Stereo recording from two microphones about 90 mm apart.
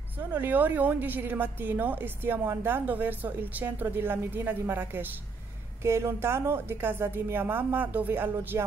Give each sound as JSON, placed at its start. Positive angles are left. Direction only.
{"t": 0.2, "sound": "a woman's voice", "side_deg": -20}